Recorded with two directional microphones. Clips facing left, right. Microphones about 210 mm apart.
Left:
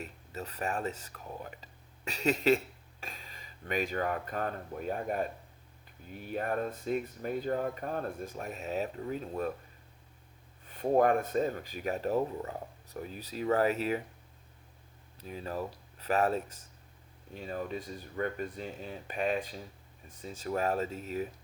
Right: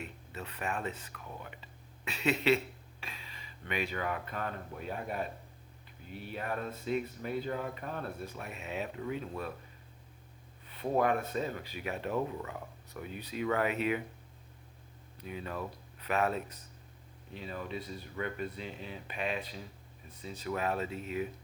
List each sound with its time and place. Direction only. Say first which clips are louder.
0.0 s speech: left 2 dB; 40° left (ahead or behind)
10.7 s speech: left 4 dB; 45° left (ahead or behind)
15.2 s speech: left 2 dB; 35° left (ahead or behind)
17.3 s speech: left 3 dB; 45° left (ahead or behind)